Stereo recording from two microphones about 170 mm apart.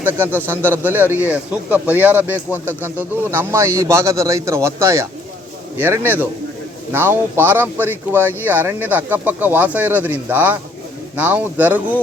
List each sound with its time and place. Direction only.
0.4 s speech: 10° right (ahead or behind)